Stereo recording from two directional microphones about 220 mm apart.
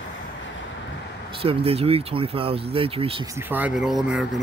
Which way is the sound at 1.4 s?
25° right (ahead or behind).